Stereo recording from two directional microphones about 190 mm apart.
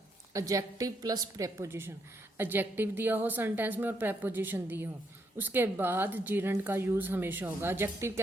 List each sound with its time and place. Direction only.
0.3 s speech: 15° right (ahead or behind)